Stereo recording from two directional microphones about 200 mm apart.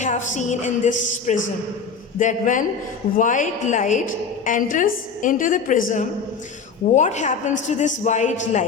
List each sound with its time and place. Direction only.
0.0 s a woman's voice: 40° left (ahead or behind)